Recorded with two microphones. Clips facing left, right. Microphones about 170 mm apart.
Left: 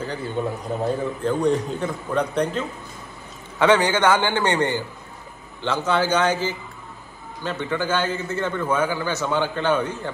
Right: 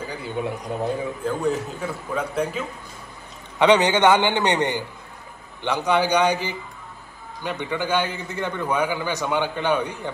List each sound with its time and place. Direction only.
0.0 s a man's voice: 10° right (ahead or behind)
3.5 s a man's voice: 20° right (ahead or behind)